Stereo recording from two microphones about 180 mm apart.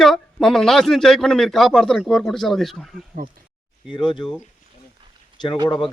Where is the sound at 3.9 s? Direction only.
25° left (ahead or behind).